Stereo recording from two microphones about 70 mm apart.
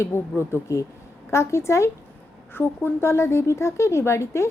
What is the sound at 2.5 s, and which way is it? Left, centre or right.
Speech, left.